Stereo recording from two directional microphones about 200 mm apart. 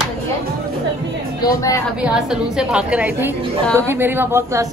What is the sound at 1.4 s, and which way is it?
Speech, 15° left (ahead or behind).